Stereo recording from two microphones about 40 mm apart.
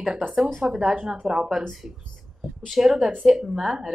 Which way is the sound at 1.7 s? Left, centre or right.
Centre.